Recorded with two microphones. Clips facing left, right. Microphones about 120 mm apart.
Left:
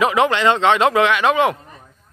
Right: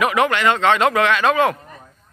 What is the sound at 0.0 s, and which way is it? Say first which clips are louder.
Speech: left 1 dB; 25° left (ahead or behind).